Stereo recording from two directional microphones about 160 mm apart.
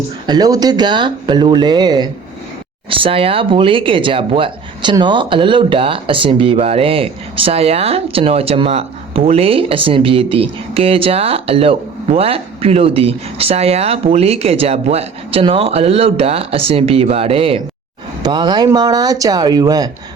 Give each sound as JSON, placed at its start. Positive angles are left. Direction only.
{"t": 0.3, "sound": "speech", "side_deg": -25}